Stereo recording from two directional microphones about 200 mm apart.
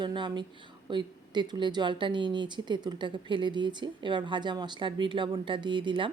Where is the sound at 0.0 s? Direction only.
25° right (ahead or behind).